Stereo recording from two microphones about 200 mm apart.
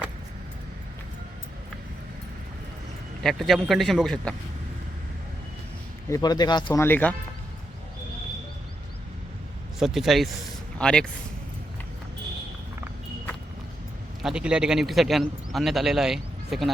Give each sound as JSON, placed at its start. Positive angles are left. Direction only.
{"t": 3.2, "sound": "a man's voice", "side_deg": 0}
{"t": 6.1, "sound": "speech", "side_deg": 20}
{"t": 6.8, "sound": "speech", "side_deg": 10}
{"t": 9.7, "sound": "a man's voice", "side_deg": 0}
{"t": 14.2, "sound": "a man's voice", "side_deg": -5}